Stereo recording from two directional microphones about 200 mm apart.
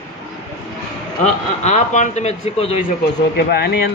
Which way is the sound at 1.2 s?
35° left (ahead or behind).